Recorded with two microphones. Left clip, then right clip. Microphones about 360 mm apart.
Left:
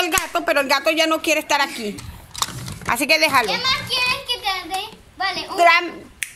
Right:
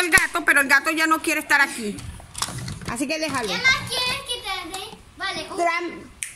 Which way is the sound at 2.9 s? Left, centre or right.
Centre.